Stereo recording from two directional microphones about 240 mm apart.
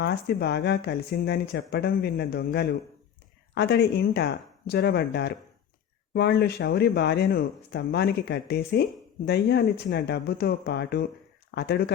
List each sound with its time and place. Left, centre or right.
0.0 s speech: left